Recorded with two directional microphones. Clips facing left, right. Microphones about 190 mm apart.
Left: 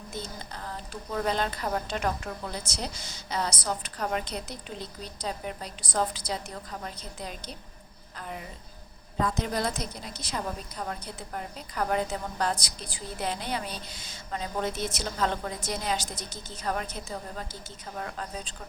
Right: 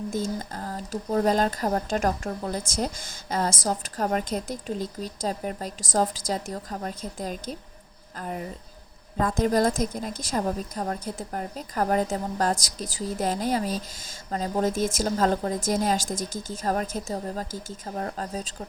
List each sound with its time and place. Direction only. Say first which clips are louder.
0.1 s speech: right 9 dB; 45° right (ahead or behind)
16.1 s speech: right 9 dB; 90° right
16.5 s speech: right 4 dB; 45° right (ahead or behind)